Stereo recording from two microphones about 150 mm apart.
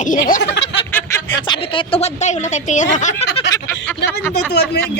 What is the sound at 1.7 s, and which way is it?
A woman's voice, 40° left (ahead or behind).